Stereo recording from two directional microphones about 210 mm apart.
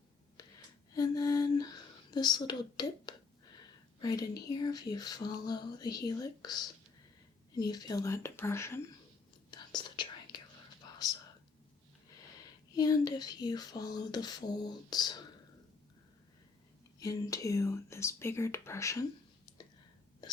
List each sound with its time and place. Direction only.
0.4 s a sound: 20° left (ahead or behind)
2.0 s speech: 20° left (ahead or behind)
9.5 s whispering: 20° left (ahead or behind)
12.7 s speech: 15° left (ahead or behind)
17.0 s speech: 15° left (ahead or behind)